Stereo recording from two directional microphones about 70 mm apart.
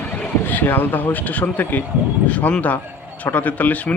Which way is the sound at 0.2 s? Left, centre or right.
Left.